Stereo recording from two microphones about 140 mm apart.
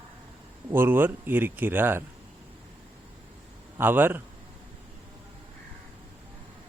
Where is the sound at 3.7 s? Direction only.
15° right (ahead or behind).